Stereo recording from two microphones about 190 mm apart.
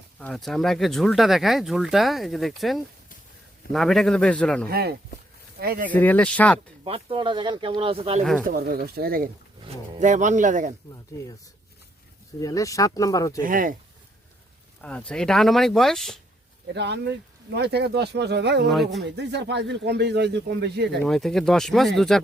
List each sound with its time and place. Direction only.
0.2 s speech: 5° left (ahead or behind)
4.7 s speech: 55° right (ahead or behind)
5.9 s speech: 10° left (ahead or behind)
6.8 s speech: 30° right (ahead or behind)
8.4 s speech: 50° right (ahead or behind)
10.0 s a man's voice: 40° right (ahead or behind)
12.4 s speech: 15° left (ahead or behind)
13.4 s speech: 45° right (ahead or behind)
14.8 s speech: 5° left (ahead or behind)
16.7 s speech: 65° right (ahead or behind)
21.0 s speech: centre (ahead or behind)